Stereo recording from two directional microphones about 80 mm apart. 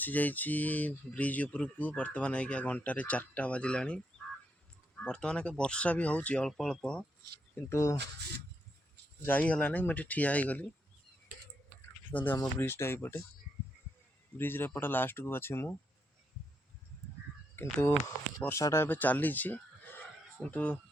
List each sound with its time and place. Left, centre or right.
0.0 s speech: left
5.0 s speech: centre
7.5 s speech: left
9.2 s speech: left
12.1 s speech: left
14.3 s speech: left
17.6 s speech: left